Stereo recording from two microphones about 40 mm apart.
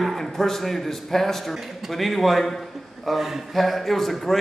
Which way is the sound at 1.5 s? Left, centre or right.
Centre.